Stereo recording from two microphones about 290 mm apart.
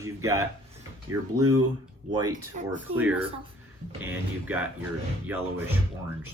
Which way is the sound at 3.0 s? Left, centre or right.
Centre.